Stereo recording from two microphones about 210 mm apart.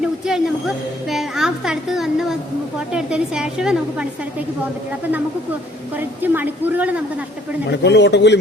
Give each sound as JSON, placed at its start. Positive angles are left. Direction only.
{"t": 0.0, "sound": "a sound", "side_deg": 0}
{"t": 2.9, "sound": "a woman's voice", "side_deg": -5}
{"t": 6.0, "sound": "a woman's voice", "side_deg": -10}
{"t": 7.7, "sound": "a man's voice", "side_deg": 55}